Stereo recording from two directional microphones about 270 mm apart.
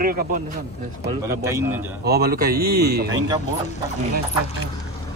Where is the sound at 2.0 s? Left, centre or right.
Right.